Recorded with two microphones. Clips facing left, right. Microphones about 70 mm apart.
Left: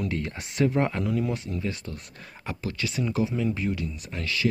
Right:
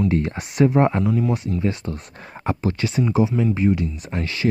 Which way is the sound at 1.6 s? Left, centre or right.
Right.